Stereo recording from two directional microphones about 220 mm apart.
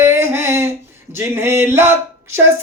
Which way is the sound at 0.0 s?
10° right (ahead or behind).